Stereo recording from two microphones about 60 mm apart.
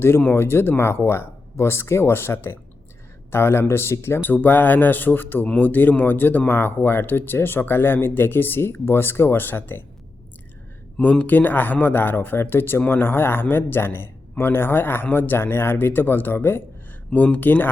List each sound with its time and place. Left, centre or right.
0.3 s speech: left
10.9 s speech: left